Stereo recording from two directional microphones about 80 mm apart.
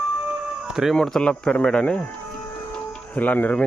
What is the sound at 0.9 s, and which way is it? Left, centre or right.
Speech, centre.